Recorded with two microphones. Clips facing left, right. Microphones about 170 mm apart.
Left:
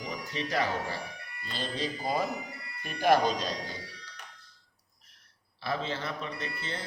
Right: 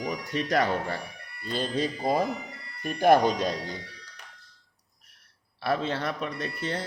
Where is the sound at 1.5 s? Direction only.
50° right (ahead or behind).